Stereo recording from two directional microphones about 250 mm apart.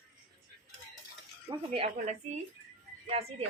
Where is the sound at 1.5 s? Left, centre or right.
Right.